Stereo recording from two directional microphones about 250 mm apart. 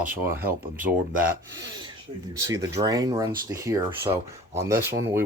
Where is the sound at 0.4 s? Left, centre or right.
Right.